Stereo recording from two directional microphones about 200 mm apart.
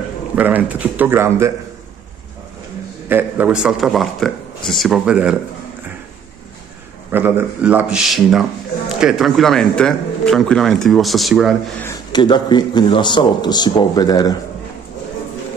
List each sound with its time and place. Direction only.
0.4 s speech: 10° right (ahead or behind)
3.1 s speech: 10° right (ahead or behind)
7.1 s speech: 10° right (ahead or behind)
12.1 s speech: 20° left (ahead or behind)